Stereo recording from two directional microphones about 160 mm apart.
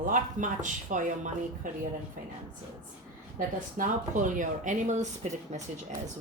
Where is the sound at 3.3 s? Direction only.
55° right (ahead or behind).